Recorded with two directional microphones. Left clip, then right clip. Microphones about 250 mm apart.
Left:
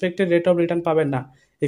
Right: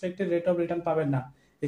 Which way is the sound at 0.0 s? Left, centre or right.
Left.